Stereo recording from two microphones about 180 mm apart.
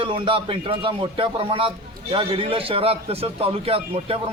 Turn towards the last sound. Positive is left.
turn(degrees=-30)  # may be behind; listen again after turning